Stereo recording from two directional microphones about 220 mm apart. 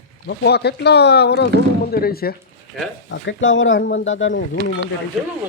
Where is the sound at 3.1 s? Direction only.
60° left (ahead or behind).